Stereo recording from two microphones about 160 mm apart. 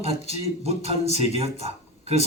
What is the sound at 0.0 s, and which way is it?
Speech, 40° right (ahead or behind).